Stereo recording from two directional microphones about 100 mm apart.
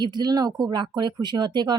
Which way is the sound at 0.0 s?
45° right (ahead or behind).